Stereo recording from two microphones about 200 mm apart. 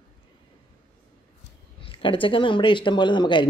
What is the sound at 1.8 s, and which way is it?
Speech, 25° left (ahead or behind).